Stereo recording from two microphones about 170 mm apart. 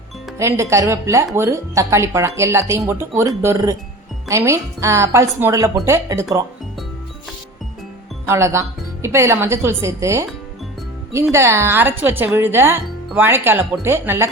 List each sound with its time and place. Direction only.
0.3 s speech: 15° right (ahead or behind)
8.3 s speech: 15° right (ahead or behind)